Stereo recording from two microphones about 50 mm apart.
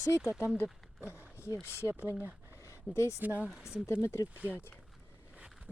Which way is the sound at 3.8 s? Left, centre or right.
Left.